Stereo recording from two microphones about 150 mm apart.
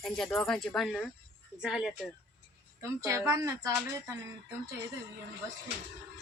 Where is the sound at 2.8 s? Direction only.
20° right (ahead or behind).